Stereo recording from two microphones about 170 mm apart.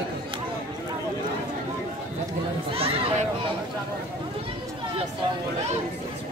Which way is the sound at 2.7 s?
35° right (ahead or behind).